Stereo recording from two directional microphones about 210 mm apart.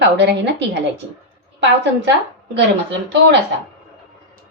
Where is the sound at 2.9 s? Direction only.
55° right (ahead or behind).